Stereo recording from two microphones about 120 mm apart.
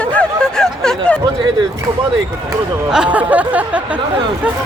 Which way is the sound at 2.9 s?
10° right (ahead or behind).